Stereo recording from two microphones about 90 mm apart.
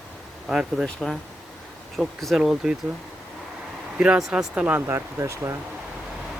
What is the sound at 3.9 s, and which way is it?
Speech, 10° right (ahead or behind).